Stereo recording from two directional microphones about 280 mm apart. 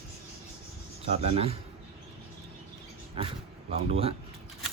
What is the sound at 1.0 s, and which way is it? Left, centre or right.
Speech, right.